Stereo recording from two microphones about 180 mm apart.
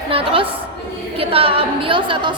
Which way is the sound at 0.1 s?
30° right (ahead or behind).